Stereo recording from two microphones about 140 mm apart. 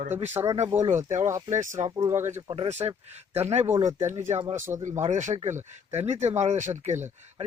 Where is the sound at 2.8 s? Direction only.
30° right (ahead or behind).